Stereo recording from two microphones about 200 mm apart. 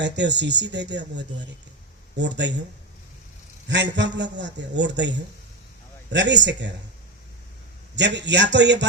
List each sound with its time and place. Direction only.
0.0 s a man's voice: 60° right (ahead or behind)
3.7 s a man's voice: 60° right (ahead or behind)
7.9 s a man's voice: 60° right (ahead or behind)